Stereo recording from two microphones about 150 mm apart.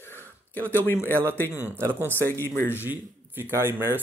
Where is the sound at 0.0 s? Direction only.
15° left (ahead or behind).